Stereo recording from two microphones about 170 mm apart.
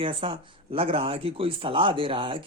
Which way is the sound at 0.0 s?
30° right (ahead or behind).